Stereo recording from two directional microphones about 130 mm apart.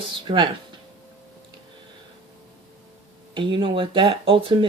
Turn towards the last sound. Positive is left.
turn(degrees=-45)  # may be behind; listen again after turning